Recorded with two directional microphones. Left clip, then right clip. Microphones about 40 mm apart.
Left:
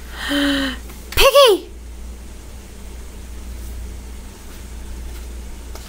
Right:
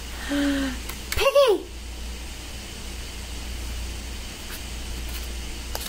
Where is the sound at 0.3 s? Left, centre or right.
Left.